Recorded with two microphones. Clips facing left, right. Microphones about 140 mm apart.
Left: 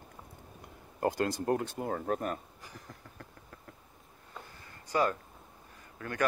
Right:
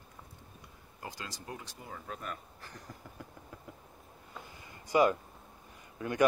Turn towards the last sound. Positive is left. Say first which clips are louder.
# right 4 dB
turn(degrees=-15)  # may be behind; listen again after turning